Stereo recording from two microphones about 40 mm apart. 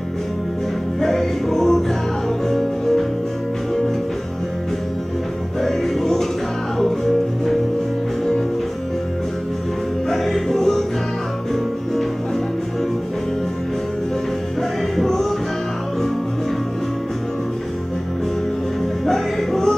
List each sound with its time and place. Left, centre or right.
1.0 s music: centre
5.6 s music: centre
10.0 s music: centre
15.0 s music: centre
19.0 s music: centre